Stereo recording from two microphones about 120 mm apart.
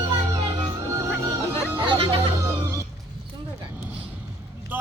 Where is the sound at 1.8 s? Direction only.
45° right (ahead or behind).